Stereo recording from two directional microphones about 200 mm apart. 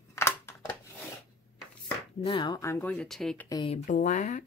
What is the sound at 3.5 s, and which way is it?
Speech, 25° left (ahead or behind).